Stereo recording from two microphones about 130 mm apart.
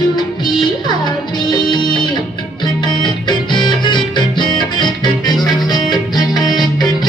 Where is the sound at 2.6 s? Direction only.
35° left (ahead or behind).